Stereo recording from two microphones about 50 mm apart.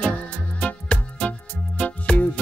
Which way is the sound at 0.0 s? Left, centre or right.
Left.